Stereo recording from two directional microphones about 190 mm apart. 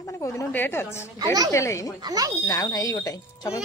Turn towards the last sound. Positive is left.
turn(degrees=20)  # may be behind; listen again after turning